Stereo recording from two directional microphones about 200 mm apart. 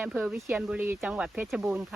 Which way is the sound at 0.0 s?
5° right (ahead or behind).